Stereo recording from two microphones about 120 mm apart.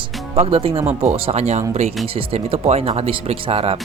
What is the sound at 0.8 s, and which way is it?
Speech, 20° right (ahead or behind).